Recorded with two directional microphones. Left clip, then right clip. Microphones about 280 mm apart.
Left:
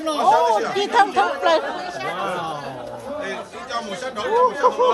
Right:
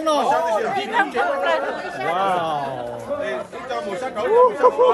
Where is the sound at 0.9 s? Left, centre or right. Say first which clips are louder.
Left 4 dB; centre.